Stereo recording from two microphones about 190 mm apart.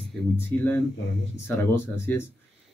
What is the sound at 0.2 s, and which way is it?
Speech, 5° left (ahead or behind).